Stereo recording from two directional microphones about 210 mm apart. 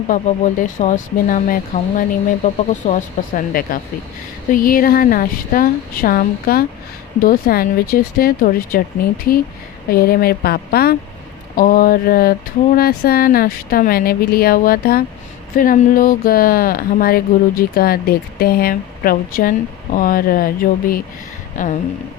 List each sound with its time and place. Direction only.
0.1 s speech: 40° left (ahead or behind)
9.9 s speech: 45° left (ahead or behind)
21.5 s a sound: 35° left (ahead or behind)